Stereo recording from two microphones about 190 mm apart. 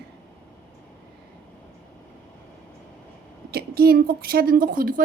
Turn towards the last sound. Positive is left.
turn(degrees=-50)  # may be behind; listen again after turning